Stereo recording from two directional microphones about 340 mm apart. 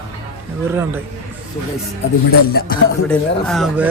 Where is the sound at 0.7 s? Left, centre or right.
Centre.